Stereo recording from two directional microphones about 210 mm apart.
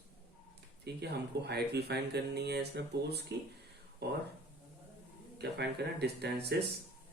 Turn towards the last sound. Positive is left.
turn(degrees=-50)  # may be behind; listen again after turning